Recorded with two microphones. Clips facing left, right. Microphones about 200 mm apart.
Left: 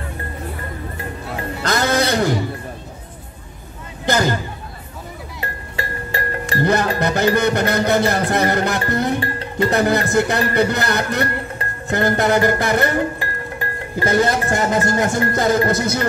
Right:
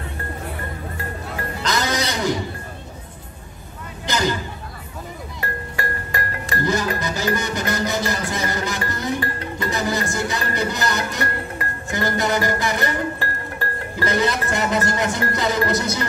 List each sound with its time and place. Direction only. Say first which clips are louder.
1.6 s music: left 5 dB; 55° left (ahead or behind)
4.0 s a sound: left 4 dB; 55° left (ahead or behind)
5.4 s music: right 1 dB; 25° left (ahead or behind)
6.6 s speech: left 5 dB; 60° left (ahead or behind)
13.2 s music: left 1 dB; 15° left (ahead or behind)
14.0 s speech: left 4 dB; 50° left (ahead or behind)